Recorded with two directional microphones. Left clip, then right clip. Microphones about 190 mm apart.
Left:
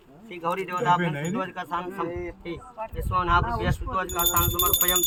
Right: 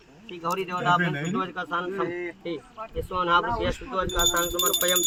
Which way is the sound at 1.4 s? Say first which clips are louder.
Right 2 dB; 15° left (ahead or behind).